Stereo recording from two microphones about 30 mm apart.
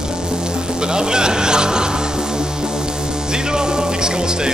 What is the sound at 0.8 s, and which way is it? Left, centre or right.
Music, right.